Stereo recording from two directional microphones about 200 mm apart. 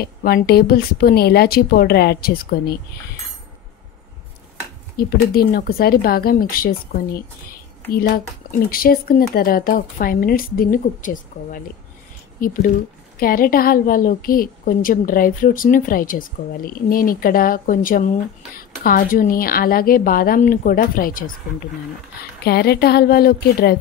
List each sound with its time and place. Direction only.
0.0 s a woman's voice: 50° left (ahead or behind)
4.9 s a woman's voice: 50° left (ahead or behind)
22.4 s a woman's voice: 50° left (ahead or behind)